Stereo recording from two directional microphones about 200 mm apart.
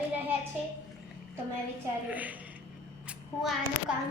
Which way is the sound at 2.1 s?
10° right (ahead or behind).